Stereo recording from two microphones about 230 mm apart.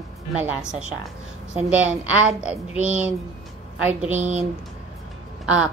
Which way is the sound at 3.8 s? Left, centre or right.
Centre.